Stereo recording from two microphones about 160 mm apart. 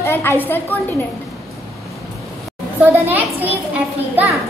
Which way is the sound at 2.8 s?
10° right (ahead or behind).